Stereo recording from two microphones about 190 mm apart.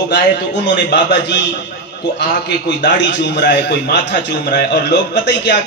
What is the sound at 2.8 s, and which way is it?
A man's voice, 65° left (ahead or behind).